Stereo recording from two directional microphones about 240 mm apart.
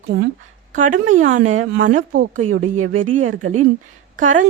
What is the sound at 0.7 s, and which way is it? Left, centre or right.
Speech, right.